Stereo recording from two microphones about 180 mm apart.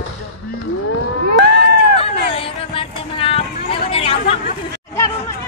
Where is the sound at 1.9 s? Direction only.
30° left (ahead or behind).